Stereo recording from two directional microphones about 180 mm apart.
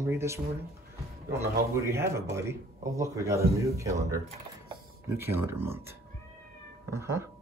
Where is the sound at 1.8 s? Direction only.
15° right (ahead or behind).